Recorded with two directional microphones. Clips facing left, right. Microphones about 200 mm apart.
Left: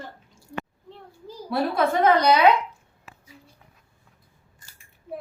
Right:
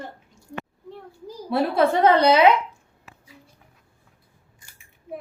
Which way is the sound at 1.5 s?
30° right (ahead or behind).